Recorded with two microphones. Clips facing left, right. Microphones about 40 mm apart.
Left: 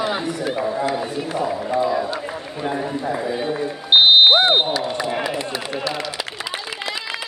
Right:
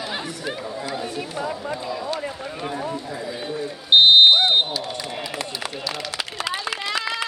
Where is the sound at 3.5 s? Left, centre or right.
Left.